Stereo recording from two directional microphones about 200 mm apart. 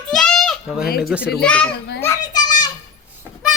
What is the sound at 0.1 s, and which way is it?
Goat, 5° left (ahead or behind).